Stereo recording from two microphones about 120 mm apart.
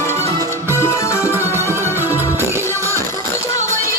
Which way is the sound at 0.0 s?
70° right (ahead or behind).